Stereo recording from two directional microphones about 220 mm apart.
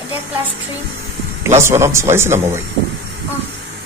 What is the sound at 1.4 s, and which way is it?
A man's voice, 10° right (ahead or behind).